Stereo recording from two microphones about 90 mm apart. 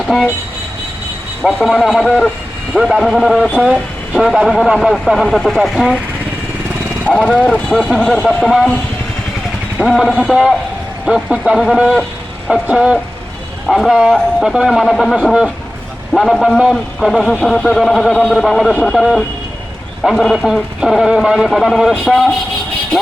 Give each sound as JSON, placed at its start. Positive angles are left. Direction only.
{"t": 1.4, "sound": "a man's voice", "side_deg": 15}
{"t": 1.6, "sound": "speech", "side_deg": 5}
{"t": 3.6, "sound": "speech", "side_deg": -15}
{"t": 4.2, "sound": "speech", "side_deg": 0}
{"t": 7.0, "sound": "speech", "side_deg": 15}
{"t": 9.7, "sound": "speech", "side_deg": -5}
{"t": 11.0, "sound": "speech", "side_deg": -10}
{"t": 16.1, "sound": "speech", "side_deg": 5}